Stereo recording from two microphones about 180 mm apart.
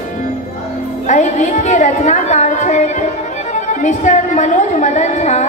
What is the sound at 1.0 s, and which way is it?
Speech, 40° left (ahead or behind).